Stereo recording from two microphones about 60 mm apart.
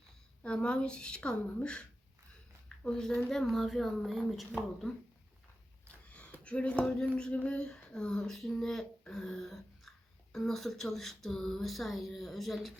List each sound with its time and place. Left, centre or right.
0.4 s speech: centre
5.9 s a sound: left
6.4 s speech: centre